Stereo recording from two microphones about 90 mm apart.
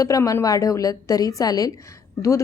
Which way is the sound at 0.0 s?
40° left (ahead or behind).